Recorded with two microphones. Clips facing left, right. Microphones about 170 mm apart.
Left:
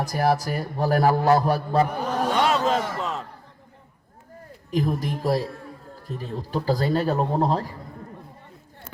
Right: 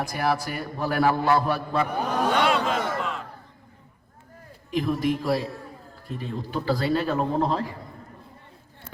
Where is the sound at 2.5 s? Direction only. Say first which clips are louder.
Left 2 dB; 40° left (ahead or behind).